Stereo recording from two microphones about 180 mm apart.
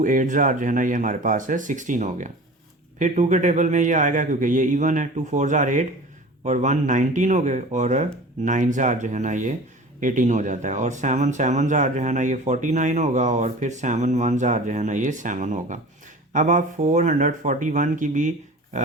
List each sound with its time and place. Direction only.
0.0 s speech: 45° right (ahead or behind)